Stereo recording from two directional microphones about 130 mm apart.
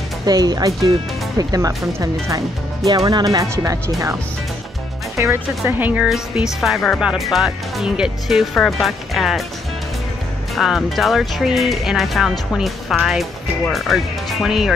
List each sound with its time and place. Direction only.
0.3 s speech: 30° right (ahead or behind); by 6.0 s 15° right (ahead or behind)
6.0 s speech: centre (ahead or behind)
10.5 s speech: centre (ahead or behind)